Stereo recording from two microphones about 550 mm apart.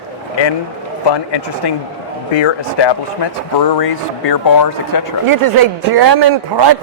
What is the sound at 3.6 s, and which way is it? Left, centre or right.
Speech, left.